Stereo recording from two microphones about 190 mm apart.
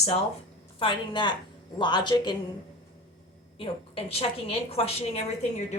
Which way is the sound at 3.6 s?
30° left (ahead or behind).